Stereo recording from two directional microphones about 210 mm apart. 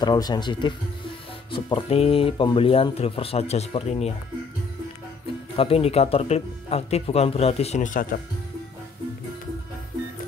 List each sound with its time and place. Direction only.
0.0 s speech: 20° left (ahead or behind)
5.6 s speech: 25° left (ahead or behind)